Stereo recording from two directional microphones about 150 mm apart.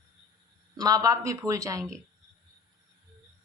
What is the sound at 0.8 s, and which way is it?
A woman's voice, 25° right (ahead or behind).